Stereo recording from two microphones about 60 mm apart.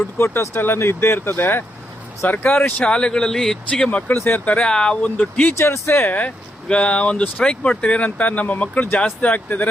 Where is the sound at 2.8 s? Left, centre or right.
Centre.